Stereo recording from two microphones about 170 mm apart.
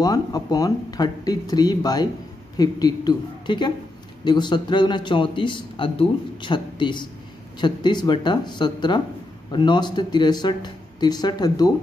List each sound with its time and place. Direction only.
0.0 s a man's voice: 20° left (ahead or behind)